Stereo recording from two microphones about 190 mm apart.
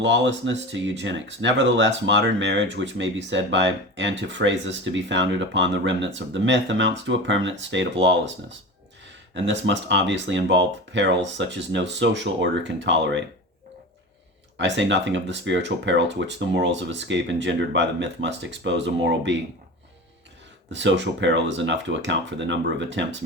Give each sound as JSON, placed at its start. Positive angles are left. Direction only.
{"t": 0.0, "sound": "speech", "side_deg": -70}
{"t": 14.6, "sound": "speech", "side_deg": -70}
{"t": 20.7, "sound": "speech", "side_deg": -70}